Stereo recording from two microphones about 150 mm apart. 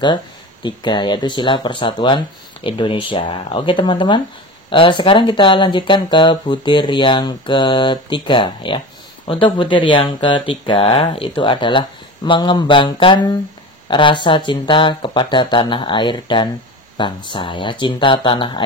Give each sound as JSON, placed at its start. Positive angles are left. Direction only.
{"t": 0.0, "sound": "speech", "side_deg": 30}